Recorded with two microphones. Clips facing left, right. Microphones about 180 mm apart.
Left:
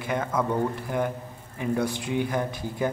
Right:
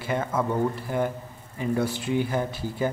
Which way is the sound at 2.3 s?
5° right (ahead or behind).